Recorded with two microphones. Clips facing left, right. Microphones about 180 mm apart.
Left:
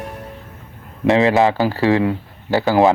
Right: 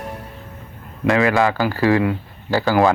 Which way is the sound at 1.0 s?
20° left (ahead or behind).